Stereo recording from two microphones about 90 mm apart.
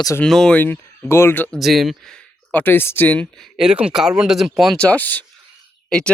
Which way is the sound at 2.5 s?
20° left (ahead or behind).